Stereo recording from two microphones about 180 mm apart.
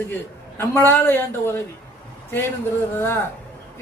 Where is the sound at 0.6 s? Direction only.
10° left (ahead or behind).